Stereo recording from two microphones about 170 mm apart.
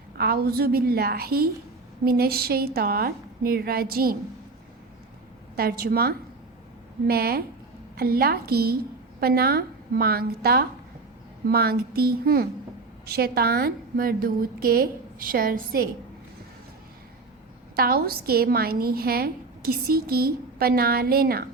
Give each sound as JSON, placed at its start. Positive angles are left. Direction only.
{"t": 0.2, "sound": "a woman's voice", "side_deg": -65}
{"t": 5.5, "sound": "a woman's voice", "side_deg": -65}
{"t": 17.7, "sound": "a woman's voice", "side_deg": -60}